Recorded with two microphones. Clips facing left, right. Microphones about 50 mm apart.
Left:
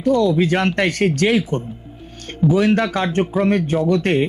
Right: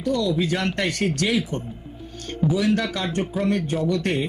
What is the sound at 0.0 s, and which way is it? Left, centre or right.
Speech, left.